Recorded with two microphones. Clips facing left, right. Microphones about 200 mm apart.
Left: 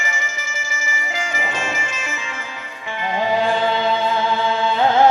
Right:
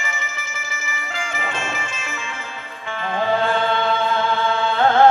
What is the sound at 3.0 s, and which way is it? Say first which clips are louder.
Music: left 1 dB; 15° left (ahead or behind).